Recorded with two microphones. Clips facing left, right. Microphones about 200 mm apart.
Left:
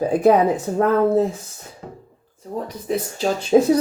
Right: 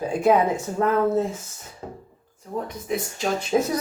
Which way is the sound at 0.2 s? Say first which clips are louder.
Left 3 dB; 35° left (ahead or behind).